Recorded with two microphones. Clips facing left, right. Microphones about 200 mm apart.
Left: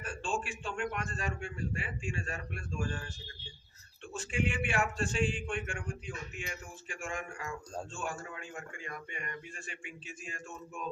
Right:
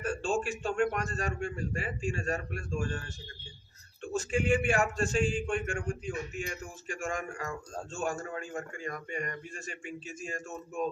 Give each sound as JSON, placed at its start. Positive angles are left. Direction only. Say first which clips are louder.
{"t": 0.0, "sound": "a man's voice", "louder": "right 6 dB", "side_deg": -40}
{"t": 4.0, "sound": "a man's voice", "louder": "right 5 dB", "side_deg": -45}